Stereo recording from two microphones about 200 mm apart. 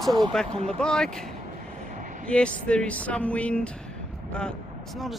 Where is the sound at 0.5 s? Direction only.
30° right (ahead or behind).